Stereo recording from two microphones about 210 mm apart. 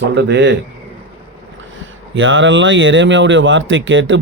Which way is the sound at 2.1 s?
65° right (ahead or behind).